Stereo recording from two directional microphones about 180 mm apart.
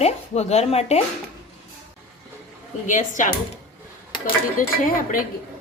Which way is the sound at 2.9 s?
45° left (ahead or behind).